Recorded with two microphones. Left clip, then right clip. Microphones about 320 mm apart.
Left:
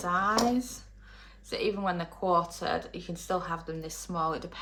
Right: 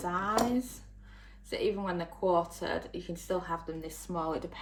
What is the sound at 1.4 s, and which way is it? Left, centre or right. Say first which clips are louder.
Speech: left 2 dB; centre.